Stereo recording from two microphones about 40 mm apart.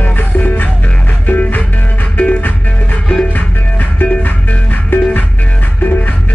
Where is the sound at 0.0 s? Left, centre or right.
Left.